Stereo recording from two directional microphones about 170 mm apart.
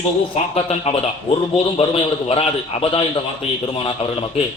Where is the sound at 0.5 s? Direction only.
40° left (ahead or behind).